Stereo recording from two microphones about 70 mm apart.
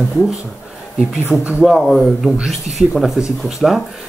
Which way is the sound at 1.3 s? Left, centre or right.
Centre.